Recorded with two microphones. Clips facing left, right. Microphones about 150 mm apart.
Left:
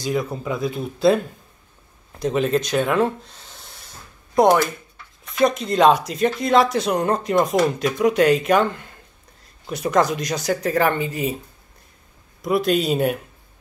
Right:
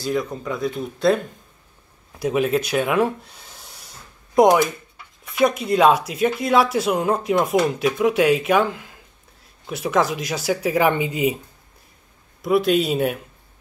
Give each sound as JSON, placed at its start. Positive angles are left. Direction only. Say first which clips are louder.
{"t": 0.1, "sound": "speech", "louder": "left 1 dB", "side_deg": 5}
{"t": 2.1, "sound": "speech", "louder": "even", "side_deg": -10}
{"t": 4.4, "sound": "a sound", "louder": "right 1 dB", "side_deg": -15}
{"t": 5.3, "sound": "speech", "louder": "even", "side_deg": -5}
{"t": 12.4, "sound": "speech", "louder": "right 2 dB", "side_deg": 0}